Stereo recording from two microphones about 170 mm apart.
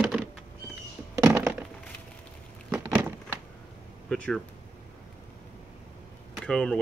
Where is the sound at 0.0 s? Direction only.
5° right (ahead or behind).